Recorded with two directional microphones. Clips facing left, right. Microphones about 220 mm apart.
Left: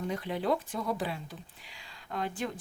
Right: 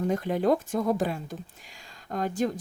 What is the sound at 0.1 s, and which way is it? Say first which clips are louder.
Speech: right 6 dB; 45° right (ahead or behind).